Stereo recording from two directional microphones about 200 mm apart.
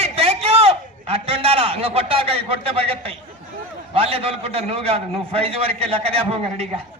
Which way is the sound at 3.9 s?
30° right (ahead or behind).